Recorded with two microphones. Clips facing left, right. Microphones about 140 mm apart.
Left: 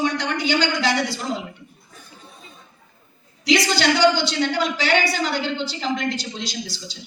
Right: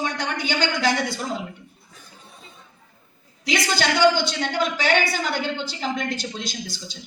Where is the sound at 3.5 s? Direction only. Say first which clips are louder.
Left 4 dB; 50° right (ahead or behind).